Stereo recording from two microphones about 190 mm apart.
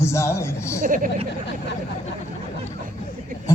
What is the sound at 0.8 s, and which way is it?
Speech, 45° right (ahead or behind).